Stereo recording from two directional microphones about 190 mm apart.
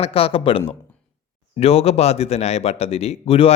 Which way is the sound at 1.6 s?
30° left (ahead or behind).